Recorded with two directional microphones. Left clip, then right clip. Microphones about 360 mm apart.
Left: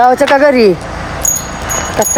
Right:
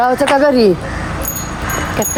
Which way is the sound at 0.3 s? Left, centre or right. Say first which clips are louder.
Left 3 dB; centre.